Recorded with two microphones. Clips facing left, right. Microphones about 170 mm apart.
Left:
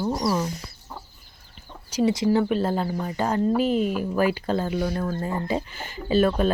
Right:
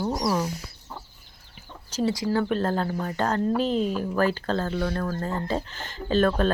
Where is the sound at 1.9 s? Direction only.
10° left (ahead or behind).